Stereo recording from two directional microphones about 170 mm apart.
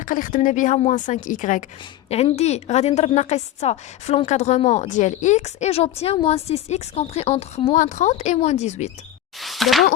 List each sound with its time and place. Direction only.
0.0 s a woman's voice: 50° left (ahead or behind)
2.0 s a woman's voice: 40° left (ahead or behind)
9.4 s speech: centre (ahead or behind)